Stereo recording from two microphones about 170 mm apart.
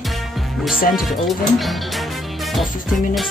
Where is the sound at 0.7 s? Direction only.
55° left (ahead or behind).